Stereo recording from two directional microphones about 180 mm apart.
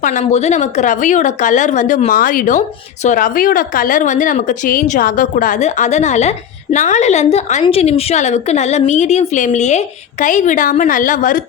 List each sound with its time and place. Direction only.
0.0 s a woman's voice: 45° left (ahead or behind)